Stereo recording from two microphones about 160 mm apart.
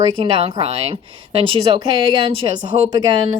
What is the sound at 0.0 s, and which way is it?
Speech, 35° right (ahead or behind).